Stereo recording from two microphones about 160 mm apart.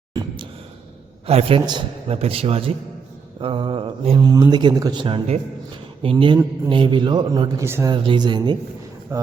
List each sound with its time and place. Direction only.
0.1 s a sound: 25° right (ahead or behind)
1.3 s a man's voice: 40° right (ahead or behind); by 7.9 s 15° right (ahead or behind)
7.9 s a man's voice: 30° right (ahead or behind)